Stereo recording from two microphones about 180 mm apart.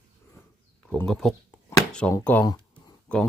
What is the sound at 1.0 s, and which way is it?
Speech, centre (ahead or behind).